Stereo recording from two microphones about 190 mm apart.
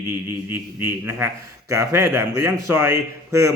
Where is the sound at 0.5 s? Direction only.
10° right (ahead or behind).